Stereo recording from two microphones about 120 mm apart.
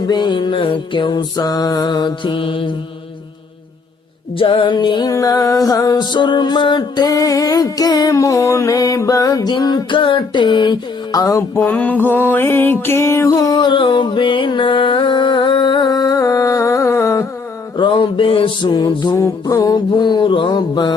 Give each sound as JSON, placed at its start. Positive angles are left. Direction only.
{"t": 0.1, "sound": "music", "side_deg": 40}
{"t": 4.4, "sound": "music", "side_deg": 50}
{"t": 5.0, "sound": "music", "side_deg": 30}
{"t": 11.7, "sound": "music", "side_deg": 15}
{"t": 17.7, "sound": "music", "side_deg": 40}